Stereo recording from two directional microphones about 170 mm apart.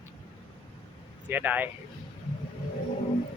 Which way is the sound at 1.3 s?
10° right (ahead or behind).